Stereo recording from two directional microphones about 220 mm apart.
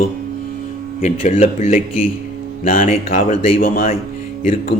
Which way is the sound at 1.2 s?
35° left (ahead or behind).